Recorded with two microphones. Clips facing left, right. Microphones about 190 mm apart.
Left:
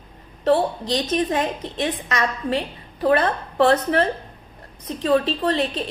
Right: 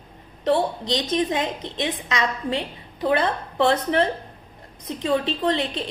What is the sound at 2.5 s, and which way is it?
A woman's voice, 20° right (ahead or behind).